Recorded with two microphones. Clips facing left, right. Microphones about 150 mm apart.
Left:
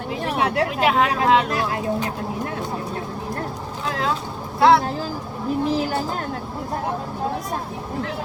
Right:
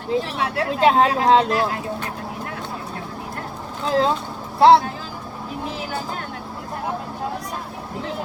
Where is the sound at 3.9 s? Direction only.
30° right (ahead or behind).